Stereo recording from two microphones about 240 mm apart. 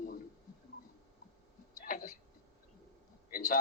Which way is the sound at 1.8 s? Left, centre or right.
Left.